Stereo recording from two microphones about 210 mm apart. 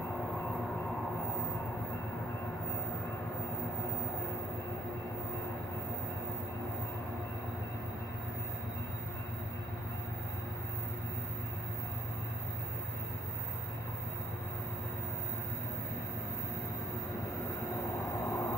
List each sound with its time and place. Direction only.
18.2 s vehicle: 15° left (ahead or behind)